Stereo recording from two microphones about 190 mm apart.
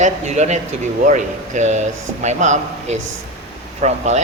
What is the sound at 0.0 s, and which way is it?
Speech, 40° right (ahead or behind).